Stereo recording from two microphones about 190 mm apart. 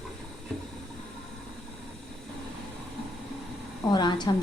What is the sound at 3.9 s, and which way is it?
Speech, 25° left (ahead or behind).